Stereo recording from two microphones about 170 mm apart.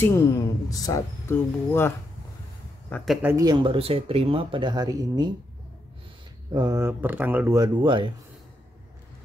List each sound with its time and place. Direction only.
0.0 s speech: 15° left (ahead or behind)
3.1 s speech: 10° right (ahead or behind)
3.3 s speech: 25° right (ahead or behind)
6.5 s speech: 20° right (ahead or behind)